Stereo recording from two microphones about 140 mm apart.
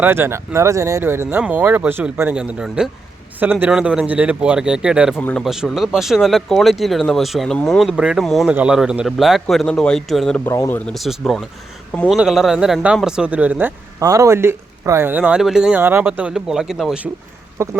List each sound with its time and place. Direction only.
0.0 s speech: 15° right (ahead or behind); by 10.4 s centre (ahead or behind)
10.4 s speech: 20° left (ahead or behind)
10.8 s speech: 5° left (ahead or behind)
14.0 s speech: 25° right (ahead or behind); by 15.8 s 5° right (ahead or behind)
15.8 s speech: 15° right (ahead or behind)
17.6 s speech: 20° right (ahead or behind)